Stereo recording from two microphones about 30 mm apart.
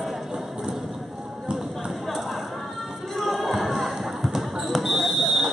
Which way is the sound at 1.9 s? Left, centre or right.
Centre.